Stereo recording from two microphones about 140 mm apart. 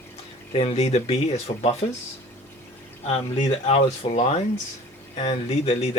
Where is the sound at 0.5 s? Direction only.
50° left (ahead or behind).